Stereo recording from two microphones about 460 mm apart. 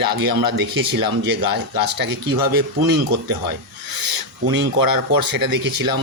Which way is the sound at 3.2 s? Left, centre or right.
Right.